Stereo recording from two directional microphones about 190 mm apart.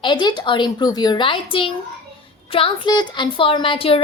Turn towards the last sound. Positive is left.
turn(degrees=30)  # may be behind; listen again after turning